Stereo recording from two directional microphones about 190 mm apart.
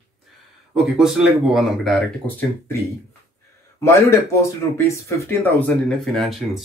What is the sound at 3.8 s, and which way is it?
Speech, 15° left (ahead or behind).